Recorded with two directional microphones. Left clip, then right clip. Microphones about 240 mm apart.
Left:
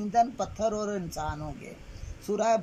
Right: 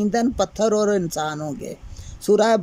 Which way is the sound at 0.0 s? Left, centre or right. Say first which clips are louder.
Right 5 dB; right.